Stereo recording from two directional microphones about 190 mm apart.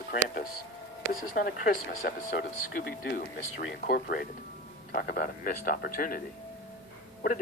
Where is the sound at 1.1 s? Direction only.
50° left (ahead or behind).